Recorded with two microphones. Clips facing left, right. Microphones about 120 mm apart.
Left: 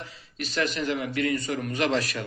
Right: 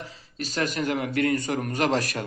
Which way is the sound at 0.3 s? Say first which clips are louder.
Right 1 dB; 40° right (ahead or behind).